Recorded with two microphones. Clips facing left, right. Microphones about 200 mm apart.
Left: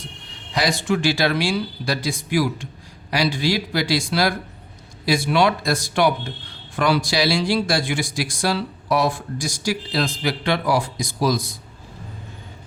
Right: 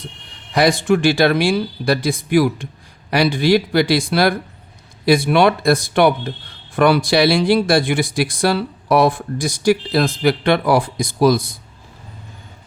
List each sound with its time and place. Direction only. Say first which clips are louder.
0.5 s speech: right 7 dB; 55° right (ahead or behind)